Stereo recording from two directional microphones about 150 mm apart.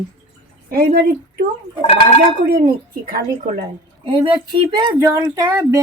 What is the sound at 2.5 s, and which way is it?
Speech, 80° right.